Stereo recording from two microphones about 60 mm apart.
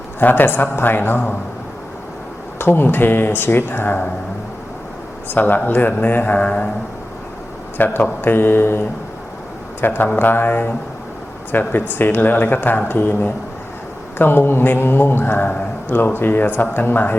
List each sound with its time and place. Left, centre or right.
0.2 s a man's voice: left
2.6 s a man's voice: left
5.3 s speech: left
7.8 s a man's voice: left
9.8 s a man's voice: left